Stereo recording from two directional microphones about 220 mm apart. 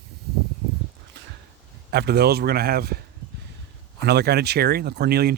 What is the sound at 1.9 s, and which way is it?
Speech, 45° right (ahead or behind).